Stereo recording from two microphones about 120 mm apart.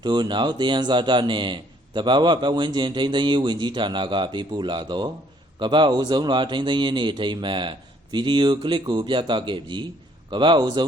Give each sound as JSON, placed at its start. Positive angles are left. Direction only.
{"t": 0.0, "sound": "a man's voice", "side_deg": -35}